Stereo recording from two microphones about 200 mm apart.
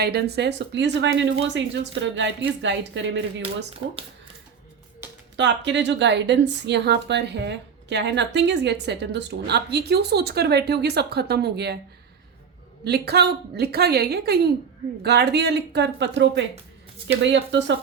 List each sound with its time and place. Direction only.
0.0 s a woman's voice: 50° right (ahead or behind)
5.4 s a woman's voice: 60° right (ahead or behind)
12.8 s a woman's voice: 55° right (ahead or behind)